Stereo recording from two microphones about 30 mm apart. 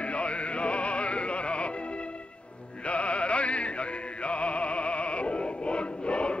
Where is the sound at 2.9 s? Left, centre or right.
Left.